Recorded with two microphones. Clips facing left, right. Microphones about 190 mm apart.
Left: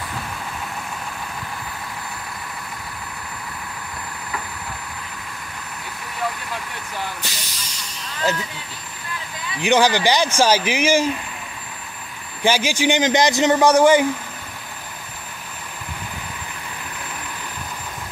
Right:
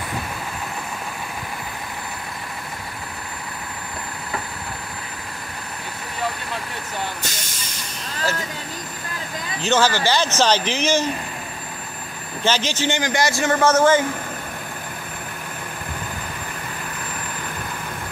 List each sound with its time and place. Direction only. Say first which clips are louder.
7.2 s train: right 2 dB; 50° right (ahead or behind)
9.6 s a man's voice: left 3 dB; 15° left (ahead or behind)
12.4 s a man's voice: left 3 dB; 10° left (ahead or behind)